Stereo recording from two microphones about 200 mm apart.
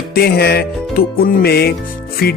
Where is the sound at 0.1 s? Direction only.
50° left (ahead or behind).